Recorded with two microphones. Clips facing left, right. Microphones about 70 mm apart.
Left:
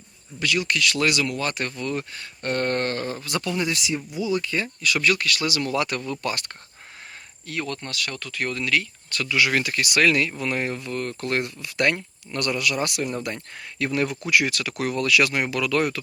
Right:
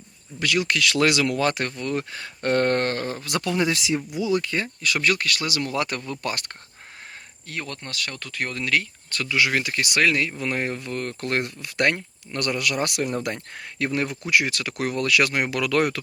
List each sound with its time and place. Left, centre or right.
0.3 s speech: right
1.6 s speech: right
2.4 s a sound: right
4.1 s speech: right
4.8 s speech: right
6.2 s speech: right
7.4 s speech: right
9.2 s speech: right
10.5 s speech: right
13.7 s speech: right